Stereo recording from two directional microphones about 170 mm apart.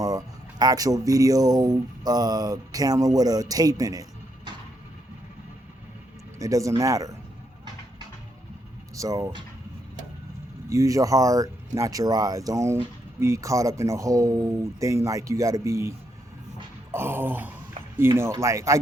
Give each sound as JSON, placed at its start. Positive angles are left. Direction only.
{"t": 0.0, "sound": "speech", "side_deg": -20}
{"t": 6.4, "sound": "speech", "side_deg": -20}
{"t": 9.0, "sound": "speech", "side_deg": -20}
{"t": 10.7, "sound": "speech", "side_deg": -20}
{"t": 16.9, "sound": "speech", "side_deg": -15}